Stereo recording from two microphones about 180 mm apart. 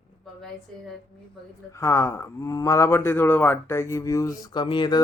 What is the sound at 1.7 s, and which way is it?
Speech, 15° left (ahead or behind).